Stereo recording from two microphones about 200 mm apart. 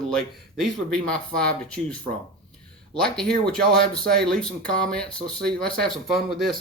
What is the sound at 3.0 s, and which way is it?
Speech, 5° left (ahead or behind).